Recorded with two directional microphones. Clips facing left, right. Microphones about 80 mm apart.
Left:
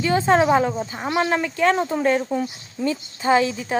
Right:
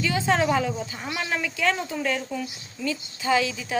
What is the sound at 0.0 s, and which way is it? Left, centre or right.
Speech, left.